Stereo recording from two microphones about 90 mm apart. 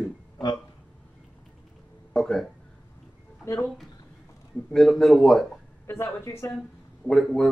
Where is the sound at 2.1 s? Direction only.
5° left (ahead or behind).